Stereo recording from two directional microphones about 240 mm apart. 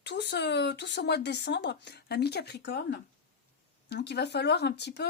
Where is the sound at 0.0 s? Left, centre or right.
Left.